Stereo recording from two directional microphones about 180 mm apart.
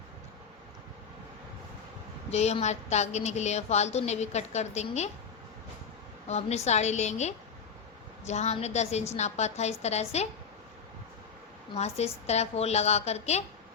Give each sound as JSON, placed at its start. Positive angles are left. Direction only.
{"t": 2.3, "sound": "a woman's voice", "side_deg": 40}
{"t": 6.2, "sound": "a woman's voice", "side_deg": 40}
{"t": 11.9, "sound": "a woman's voice", "side_deg": 35}